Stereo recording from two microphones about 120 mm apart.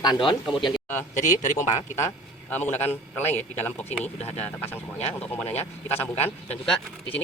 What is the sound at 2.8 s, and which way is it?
Speech, 15° left (ahead or behind).